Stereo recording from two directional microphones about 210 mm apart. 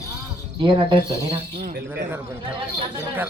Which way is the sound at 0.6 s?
25° right (ahead or behind).